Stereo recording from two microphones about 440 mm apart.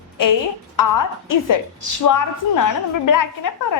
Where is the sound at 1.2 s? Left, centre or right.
Left.